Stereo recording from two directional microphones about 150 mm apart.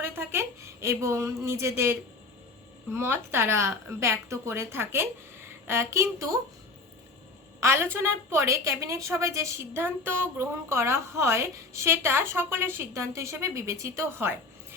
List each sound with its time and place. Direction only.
0.0 s a sound: 15° right (ahead or behind)
2.9 s a woman's voice: 15° right (ahead or behind)
7.6 s a woman's voice: 15° right (ahead or behind)